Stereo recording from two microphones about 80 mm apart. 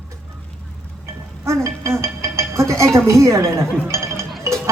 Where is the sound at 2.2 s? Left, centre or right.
Right.